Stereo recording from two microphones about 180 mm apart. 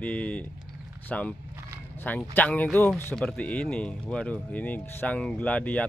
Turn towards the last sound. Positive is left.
turn(degrees=5)  # may be behind; listen again after turning